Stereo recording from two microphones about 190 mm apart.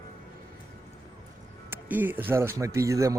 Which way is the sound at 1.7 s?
10° right (ahead or behind).